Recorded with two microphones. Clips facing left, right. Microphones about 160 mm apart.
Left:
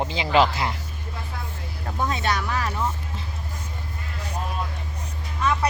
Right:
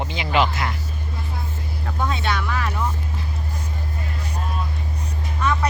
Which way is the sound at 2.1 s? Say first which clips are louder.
Even; 40° left (ahead or behind).